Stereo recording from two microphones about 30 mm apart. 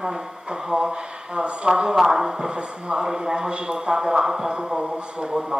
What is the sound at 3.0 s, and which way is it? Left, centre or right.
Speech, centre.